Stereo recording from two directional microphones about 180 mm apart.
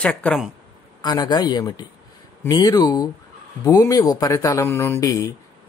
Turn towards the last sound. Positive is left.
turn(degrees=15)  # may be behind; listen again after turning